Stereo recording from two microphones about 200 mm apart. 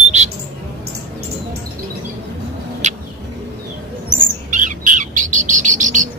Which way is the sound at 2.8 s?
35° right (ahead or behind).